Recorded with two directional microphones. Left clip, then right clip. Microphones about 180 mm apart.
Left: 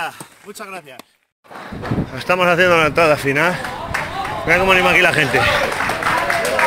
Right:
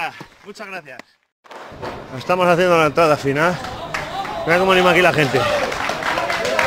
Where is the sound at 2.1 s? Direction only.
15° right (ahead or behind).